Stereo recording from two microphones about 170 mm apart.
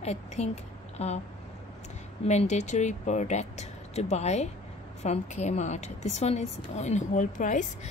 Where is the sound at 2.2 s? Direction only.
40° left (ahead or behind).